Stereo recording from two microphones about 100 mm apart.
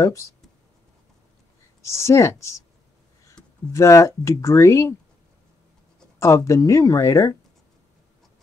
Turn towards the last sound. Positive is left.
turn(degrees=30)  # may be behind; listen again after turning